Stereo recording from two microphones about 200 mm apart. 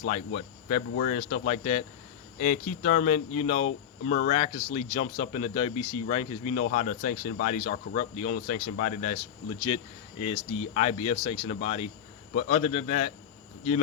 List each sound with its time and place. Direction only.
0.1 s speech: 35° left (ahead or behind)
9.6 s speech: 25° left (ahead or behind)